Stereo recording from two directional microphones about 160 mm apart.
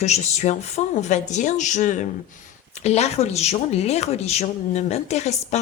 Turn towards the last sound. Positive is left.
turn(degrees=45)  # may be behind; listen again after turning